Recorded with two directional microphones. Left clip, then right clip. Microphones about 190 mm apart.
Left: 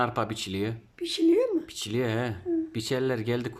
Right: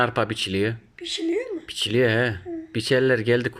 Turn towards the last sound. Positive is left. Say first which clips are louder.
# right 9 dB
turn(degrees=0)  # may be behind; listen again after turning